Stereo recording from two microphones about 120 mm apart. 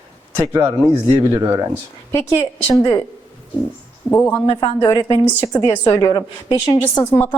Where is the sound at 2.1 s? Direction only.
25° left (ahead or behind).